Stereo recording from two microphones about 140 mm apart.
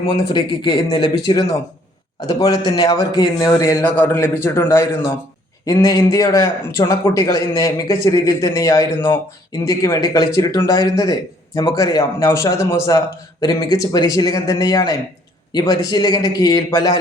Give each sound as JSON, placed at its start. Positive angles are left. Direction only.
{"t": 0.3, "sound": "a man's voice", "side_deg": 30}